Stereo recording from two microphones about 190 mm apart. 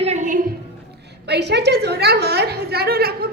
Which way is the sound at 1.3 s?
60° right (ahead or behind).